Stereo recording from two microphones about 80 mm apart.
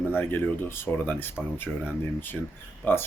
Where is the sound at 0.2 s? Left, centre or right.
Left.